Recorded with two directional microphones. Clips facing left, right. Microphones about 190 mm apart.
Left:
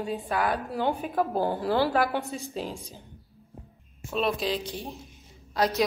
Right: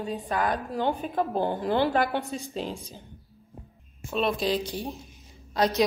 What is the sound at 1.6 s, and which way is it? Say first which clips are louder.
Speech: right 1 dB; 20° right (ahead or behind).